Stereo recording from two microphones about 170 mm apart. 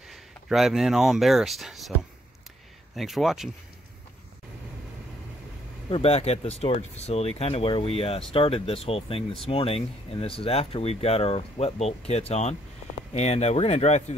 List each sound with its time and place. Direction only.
0.1 s speech: centre (ahead or behind)
3.0 s speech: centre (ahead or behind)
5.9 s speech: 35° left (ahead or behind)